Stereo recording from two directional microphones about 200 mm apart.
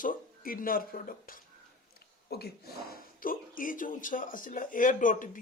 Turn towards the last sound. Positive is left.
turn(degrees=40)  # may be behind; listen again after turning